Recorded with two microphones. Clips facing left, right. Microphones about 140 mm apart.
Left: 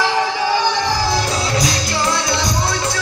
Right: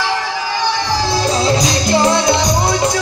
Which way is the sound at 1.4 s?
20° right (ahead or behind).